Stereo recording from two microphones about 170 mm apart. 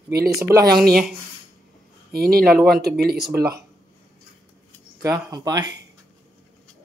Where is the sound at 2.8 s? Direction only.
65° right (ahead or behind).